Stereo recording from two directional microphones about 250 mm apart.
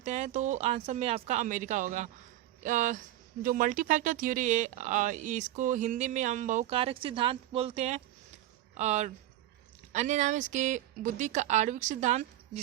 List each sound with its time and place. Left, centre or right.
0.0 s speech: right